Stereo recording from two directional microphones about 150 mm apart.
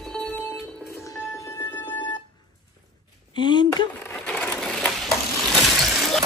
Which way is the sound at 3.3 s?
30° left (ahead or behind).